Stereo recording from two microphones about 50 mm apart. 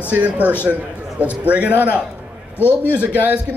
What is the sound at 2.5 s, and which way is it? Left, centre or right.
Speech, left.